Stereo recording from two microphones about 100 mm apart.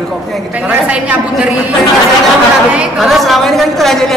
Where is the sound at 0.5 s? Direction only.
15° right (ahead or behind).